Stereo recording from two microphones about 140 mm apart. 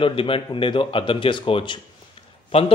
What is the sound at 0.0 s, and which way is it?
A man's voice, 40° left (ahead or behind).